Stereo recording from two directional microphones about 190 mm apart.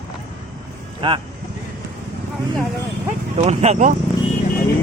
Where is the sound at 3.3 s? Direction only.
35° right (ahead or behind).